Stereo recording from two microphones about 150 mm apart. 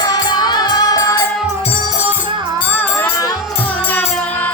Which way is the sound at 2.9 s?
20° left (ahead or behind).